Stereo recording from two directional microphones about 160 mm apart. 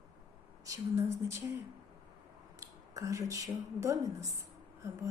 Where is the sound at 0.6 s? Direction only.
20° right (ahead or behind).